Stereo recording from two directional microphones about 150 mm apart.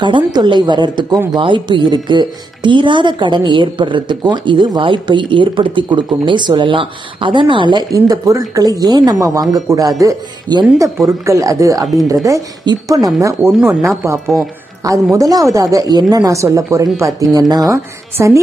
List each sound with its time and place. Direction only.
0.0 s a woman's voice: 30° right (ahead or behind)